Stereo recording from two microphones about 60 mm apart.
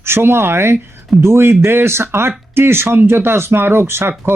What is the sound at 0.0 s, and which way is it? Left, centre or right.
Speech, right.